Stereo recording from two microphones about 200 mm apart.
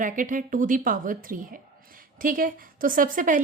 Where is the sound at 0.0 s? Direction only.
40° right (ahead or behind).